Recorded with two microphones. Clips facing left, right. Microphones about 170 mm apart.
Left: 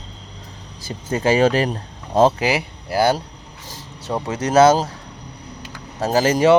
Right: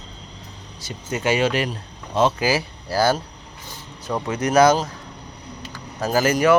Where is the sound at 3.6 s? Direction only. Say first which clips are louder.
Left 2 dB; 90° left.